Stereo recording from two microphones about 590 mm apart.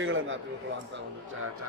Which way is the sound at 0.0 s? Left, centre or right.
Centre.